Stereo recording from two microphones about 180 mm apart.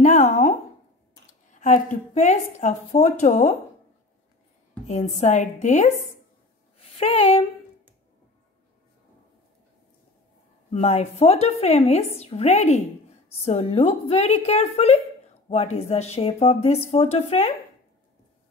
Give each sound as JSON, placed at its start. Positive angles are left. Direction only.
{"t": 0.0, "sound": "a sound", "side_deg": 40}
{"t": 1.5, "sound": "a woman's voice", "side_deg": 40}
{"t": 5.2, "sound": "a woman's voice", "side_deg": 40}
{"t": 6.9, "sound": "speech", "side_deg": 35}
{"t": 10.7, "sound": "a woman's voice", "side_deg": 35}